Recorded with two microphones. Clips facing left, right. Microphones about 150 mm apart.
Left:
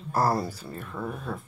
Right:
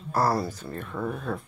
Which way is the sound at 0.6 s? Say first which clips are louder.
Right 3 dB; 5° left (ahead or behind).